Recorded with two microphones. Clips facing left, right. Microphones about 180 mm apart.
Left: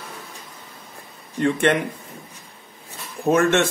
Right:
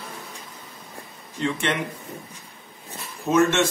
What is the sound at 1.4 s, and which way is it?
Speech, 55° left (ahead or behind).